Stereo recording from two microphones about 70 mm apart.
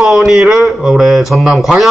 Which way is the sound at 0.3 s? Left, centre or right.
Centre.